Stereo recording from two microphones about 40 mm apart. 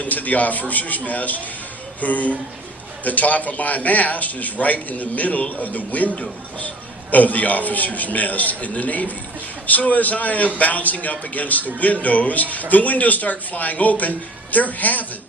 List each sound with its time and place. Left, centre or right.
0.0 s a man's voice: left
7.1 s a man's voice: left